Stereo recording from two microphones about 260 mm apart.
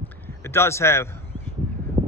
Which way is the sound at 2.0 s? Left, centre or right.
Right.